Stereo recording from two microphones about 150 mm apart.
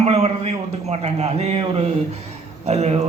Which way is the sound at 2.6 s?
45° right (ahead or behind).